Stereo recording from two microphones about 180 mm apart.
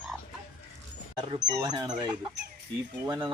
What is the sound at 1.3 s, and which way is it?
Speech, 25° right (ahead or behind).